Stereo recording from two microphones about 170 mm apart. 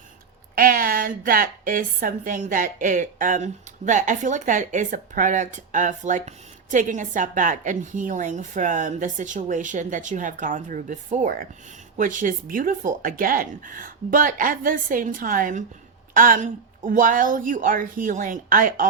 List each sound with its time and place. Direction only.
0.5 s a woman's voice: 55° right (ahead or behind)